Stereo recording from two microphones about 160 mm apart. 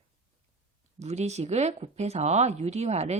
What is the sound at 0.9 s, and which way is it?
Speech, 45° right (ahead or behind).